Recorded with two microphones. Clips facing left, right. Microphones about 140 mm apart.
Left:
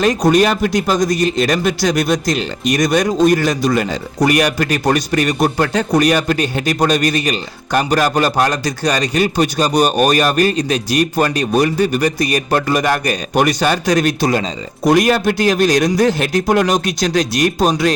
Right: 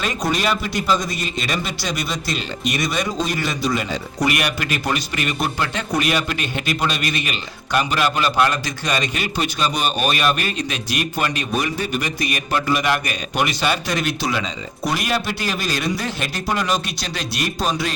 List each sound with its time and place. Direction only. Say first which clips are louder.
0.0 s a man's voice: left 10 dB; 45° left (ahead or behind)